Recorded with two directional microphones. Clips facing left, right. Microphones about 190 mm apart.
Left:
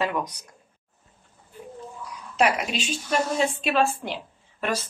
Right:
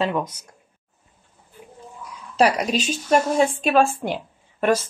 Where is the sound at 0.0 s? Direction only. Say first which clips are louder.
Right 3 dB; 25° right (ahead or behind).